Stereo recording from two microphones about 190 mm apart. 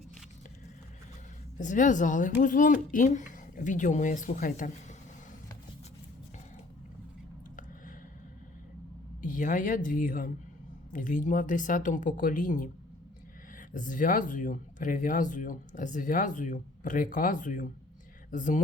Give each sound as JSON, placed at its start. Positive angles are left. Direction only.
{"t": 1.5, "sound": "speech", "side_deg": 40}
{"t": 9.2, "sound": "speech", "side_deg": 45}
{"t": 13.7, "sound": "speech", "side_deg": 45}